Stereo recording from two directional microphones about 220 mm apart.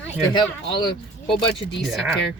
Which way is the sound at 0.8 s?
20° left (ahead or behind).